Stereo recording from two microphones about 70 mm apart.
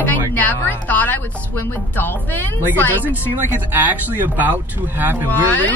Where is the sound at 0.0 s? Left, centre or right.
Left.